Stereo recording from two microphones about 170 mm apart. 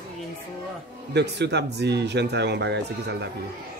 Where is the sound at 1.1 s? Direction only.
85° right.